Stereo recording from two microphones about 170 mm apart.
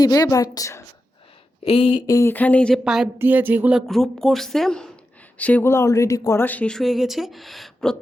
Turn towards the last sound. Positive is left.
turn(degrees=0)  # may be behind; listen again after turning